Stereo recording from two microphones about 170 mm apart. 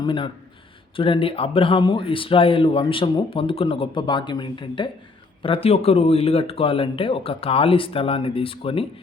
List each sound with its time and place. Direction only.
0.0 s speech: 30° left (ahead or behind)